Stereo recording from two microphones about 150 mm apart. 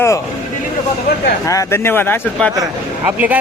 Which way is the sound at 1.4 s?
20° left (ahead or behind).